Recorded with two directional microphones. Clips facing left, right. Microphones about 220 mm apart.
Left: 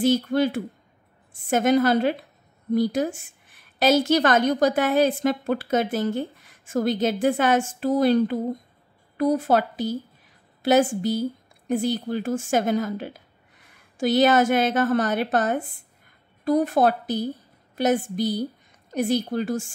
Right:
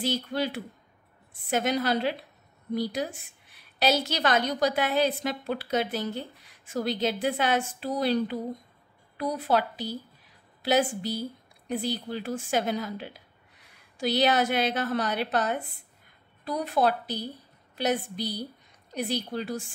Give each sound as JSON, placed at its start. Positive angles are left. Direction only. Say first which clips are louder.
{"t": 0.0, "sound": "a woman's voice", "louder": "left 9 dB", "side_deg": 45}